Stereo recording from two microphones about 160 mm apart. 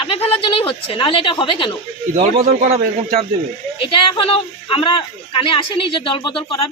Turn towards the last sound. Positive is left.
turn(degrees=35)  # may be behind; listen again after turning